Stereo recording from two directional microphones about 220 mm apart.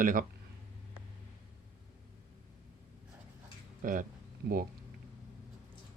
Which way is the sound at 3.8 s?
40° right (ahead or behind).